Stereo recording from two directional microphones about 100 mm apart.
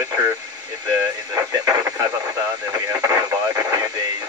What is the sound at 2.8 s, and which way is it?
Radio, 35° right (ahead or behind).